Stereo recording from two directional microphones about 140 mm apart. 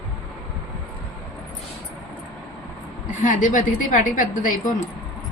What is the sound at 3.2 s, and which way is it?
A woman's voice, 65° left (ahead or behind).